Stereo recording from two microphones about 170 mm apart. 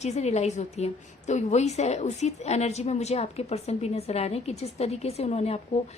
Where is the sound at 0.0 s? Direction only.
40° left (ahead or behind).